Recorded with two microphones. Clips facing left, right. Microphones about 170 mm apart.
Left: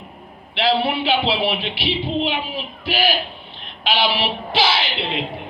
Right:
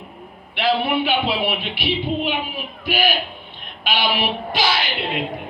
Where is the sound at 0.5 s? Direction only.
50° right (ahead or behind).